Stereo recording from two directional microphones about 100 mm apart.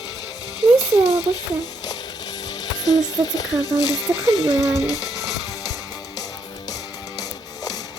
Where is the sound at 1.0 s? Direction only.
40° left (ahead or behind).